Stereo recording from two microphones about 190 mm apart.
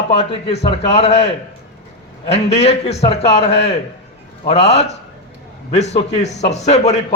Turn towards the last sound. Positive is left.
turn(degrees=35)  # may be behind; listen again after turning